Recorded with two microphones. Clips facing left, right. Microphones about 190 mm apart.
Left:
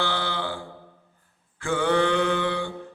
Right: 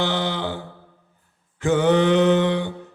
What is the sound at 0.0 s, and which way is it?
Mantra, 20° right (ahead or behind).